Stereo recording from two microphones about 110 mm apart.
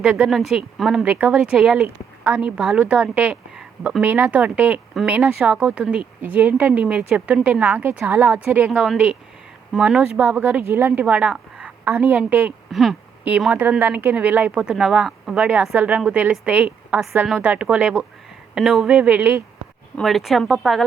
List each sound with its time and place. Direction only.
0.0 s speech: 5° right (ahead or behind)
4.0 s a woman's voice: 15° right (ahead or behind)
8.5 s a woman's voice: 10° right (ahead or behind)
12.7 s speech: centre (ahead or behind)
13.6 s speech: 20° right (ahead or behind)
20.0 s speech: centre (ahead or behind)